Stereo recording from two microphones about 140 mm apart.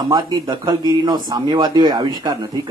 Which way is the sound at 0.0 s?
30° right (ahead or behind).